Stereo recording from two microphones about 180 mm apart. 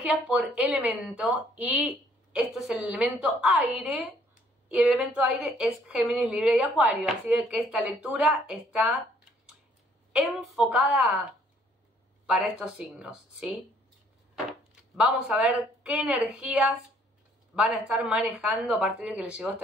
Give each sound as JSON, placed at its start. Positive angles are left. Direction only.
{"t": 0.0, "sound": "a woman's voice", "side_deg": -5}
{"t": 10.1, "sound": "a woman's voice", "side_deg": 0}
{"t": 12.3, "sound": "a woman's voice", "side_deg": -5}
{"t": 15.0, "sound": "a woman's voice", "side_deg": -5}